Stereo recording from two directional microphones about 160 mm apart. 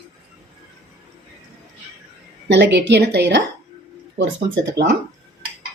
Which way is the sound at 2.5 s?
90° right.